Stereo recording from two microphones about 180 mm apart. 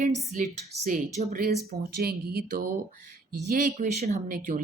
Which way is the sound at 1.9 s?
60° right (ahead or behind).